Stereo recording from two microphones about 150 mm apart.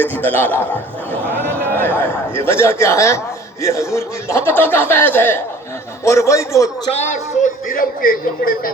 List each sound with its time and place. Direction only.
0.0 s a man's voice: 10° left (ahead or behind)
6.9 s speech: 55° left (ahead or behind); by 8.7 s 75° left (ahead or behind)